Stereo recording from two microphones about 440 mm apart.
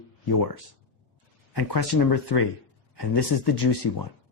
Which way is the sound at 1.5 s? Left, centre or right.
Left.